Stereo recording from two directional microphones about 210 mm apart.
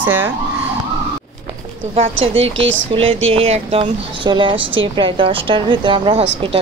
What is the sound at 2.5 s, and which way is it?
Speech, 65° right (ahead or behind).